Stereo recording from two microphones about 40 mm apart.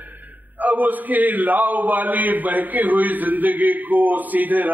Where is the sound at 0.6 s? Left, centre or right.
Right.